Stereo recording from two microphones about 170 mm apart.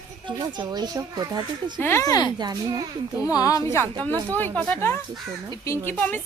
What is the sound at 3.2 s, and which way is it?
A woman's voice, 20° left (ahead or behind).